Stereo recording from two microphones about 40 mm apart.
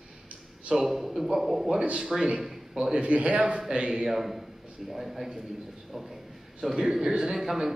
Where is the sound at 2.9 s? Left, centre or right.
Right.